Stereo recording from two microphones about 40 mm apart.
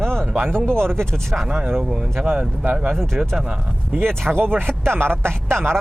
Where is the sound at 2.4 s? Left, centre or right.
Right.